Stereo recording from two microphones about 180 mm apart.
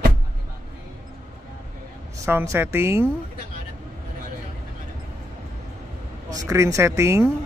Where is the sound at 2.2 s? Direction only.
15° right (ahead or behind).